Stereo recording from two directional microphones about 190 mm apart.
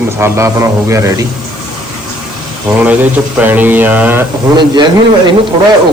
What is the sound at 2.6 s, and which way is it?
Speech, 10° right (ahead or behind).